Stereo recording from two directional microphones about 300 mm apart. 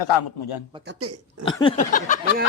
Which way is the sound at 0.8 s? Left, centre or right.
Right.